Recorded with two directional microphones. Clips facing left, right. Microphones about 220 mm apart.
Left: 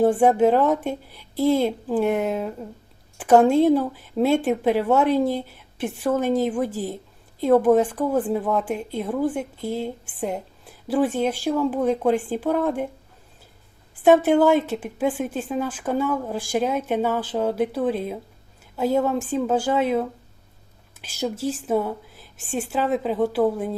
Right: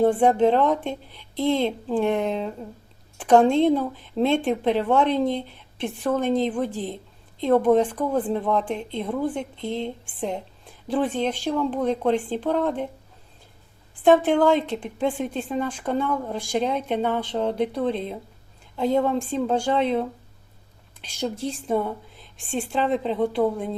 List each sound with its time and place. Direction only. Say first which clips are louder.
0.0 s a woman's voice: left 1 dB; 5° left (ahead or behind)
13.9 s a woman's voice: left 2 dB; 5° left (ahead or behind)